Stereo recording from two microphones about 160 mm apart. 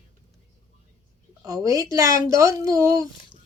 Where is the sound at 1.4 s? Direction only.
20° right (ahead or behind).